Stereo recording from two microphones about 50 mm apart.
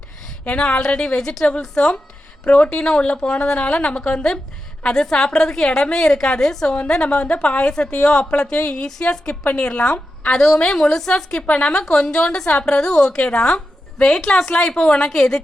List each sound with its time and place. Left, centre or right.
0.4 s a woman's voice: left
10.3 s a woman's voice: centre
11.4 s a woman's voice: left
11.7 s a woman's voice: centre
13.1 s a woman's voice: left
14.9 s a woman's voice: centre